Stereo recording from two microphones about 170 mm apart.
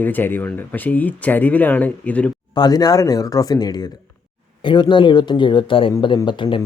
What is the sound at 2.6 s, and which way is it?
Speech, 25° left (ahead or behind).